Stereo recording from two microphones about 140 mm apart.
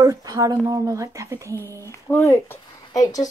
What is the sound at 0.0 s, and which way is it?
Speech, 25° right (ahead or behind).